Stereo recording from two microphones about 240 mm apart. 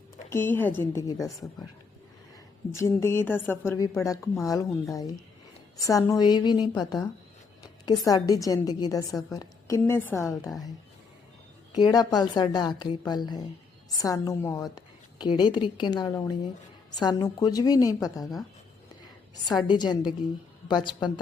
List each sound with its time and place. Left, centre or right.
0.3 s a woman's voice: centre
2.7 s a woman's voice: centre
11.8 s a woman's voice: centre
19.5 s a woman's voice: centre